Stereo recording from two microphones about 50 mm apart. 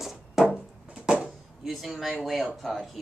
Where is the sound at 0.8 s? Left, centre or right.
Right.